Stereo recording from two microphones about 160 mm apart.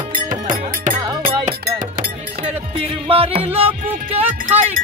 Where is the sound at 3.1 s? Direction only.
35° right (ahead or behind).